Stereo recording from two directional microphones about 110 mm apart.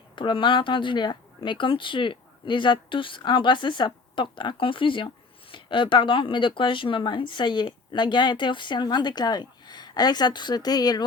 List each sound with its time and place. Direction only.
0.2 s speech: 50° left (ahead or behind)